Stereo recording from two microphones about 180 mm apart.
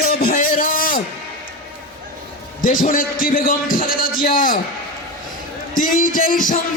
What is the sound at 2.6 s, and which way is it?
A man's voice, 50° left (ahead or behind).